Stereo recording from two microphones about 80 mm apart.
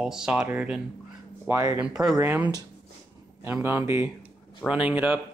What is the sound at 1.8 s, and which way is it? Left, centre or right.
Speech, centre.